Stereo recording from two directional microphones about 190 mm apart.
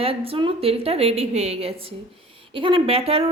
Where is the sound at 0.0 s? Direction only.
30° right (ahead or behind).